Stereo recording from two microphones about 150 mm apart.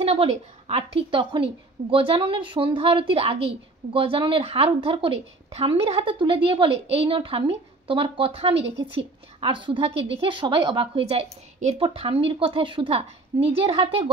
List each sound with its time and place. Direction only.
0.0 s a woman's voice: 45° right (ahead or behind)